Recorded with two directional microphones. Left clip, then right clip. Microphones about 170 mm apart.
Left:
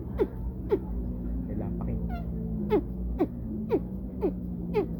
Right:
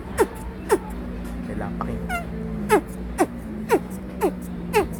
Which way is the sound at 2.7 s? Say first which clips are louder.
Right 8 dB; 10° right (ahead or behind).